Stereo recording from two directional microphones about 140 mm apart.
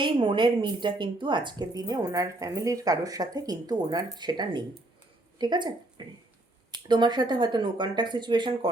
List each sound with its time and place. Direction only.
0.0 s a woman's voice: 35° right (ahead or behind)